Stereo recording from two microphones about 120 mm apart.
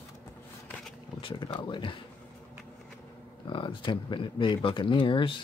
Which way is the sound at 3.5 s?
45° left (ahead or behind).